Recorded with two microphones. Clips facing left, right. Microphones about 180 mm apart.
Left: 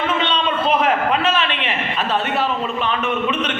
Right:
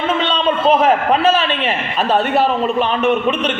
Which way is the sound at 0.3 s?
35° right (ahead or behind).